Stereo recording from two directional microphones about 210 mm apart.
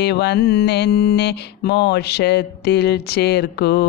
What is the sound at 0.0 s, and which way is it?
Mantra, 50° left (ahead or behind).